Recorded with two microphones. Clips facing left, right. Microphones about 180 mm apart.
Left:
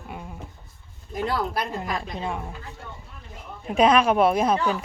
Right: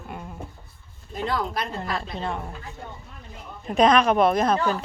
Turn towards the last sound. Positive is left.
turn(degrees=10)  # may be behind; listen again after turning